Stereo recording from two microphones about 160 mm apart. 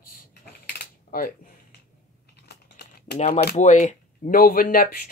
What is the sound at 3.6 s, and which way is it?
Speech, 50° left (ahead or behind).